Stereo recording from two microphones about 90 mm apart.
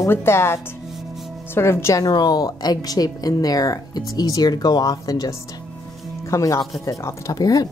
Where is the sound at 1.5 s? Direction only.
30° left (ahead or behind).